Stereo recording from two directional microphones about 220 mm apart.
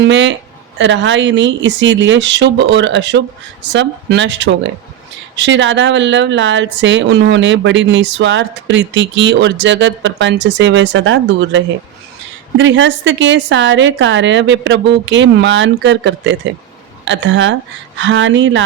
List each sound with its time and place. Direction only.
0.1 s a woman's voice: 55° right (ahead or behind)